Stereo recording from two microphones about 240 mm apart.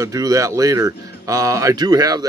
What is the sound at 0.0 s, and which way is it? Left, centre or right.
Speech, centre.